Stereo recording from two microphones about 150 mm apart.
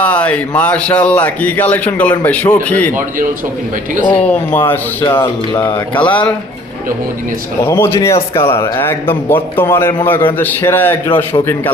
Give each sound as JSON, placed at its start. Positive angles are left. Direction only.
{"t": 0.0, "sound": "a man's voice", "side_deg": 10}
{"t": 4.1, "sound": "a man's voice", "side_deg": 10}
{"t": 5.2, "sound": "speech", "side_deg": 30}
{"t": 5.9, "sound": "a man's voice", "side_deg": 10}
{"t": 7.6, "sound": "a man's voice", "side_deg": 15}